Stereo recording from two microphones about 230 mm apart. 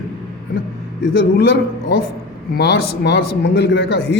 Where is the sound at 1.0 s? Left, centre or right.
Left.